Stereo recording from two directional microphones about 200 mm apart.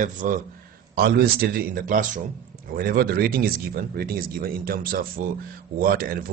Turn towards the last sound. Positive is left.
turn(degrees=-45)  # may be behind; listen again after turning